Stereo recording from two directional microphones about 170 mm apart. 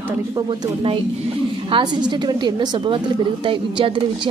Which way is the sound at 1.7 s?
25° right (ahead or behind).